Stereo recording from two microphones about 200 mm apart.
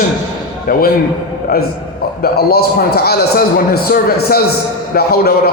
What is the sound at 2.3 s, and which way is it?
A man's voice, 50° left (ahead or behind).